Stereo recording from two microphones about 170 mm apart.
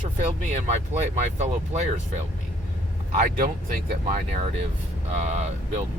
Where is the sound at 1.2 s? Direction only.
40° right (ahead or behind).